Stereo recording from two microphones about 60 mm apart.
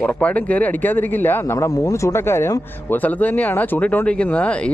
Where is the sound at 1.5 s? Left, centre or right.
Left.